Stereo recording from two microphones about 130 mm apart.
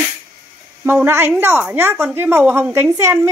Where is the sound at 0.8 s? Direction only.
15° right (ahead or behind).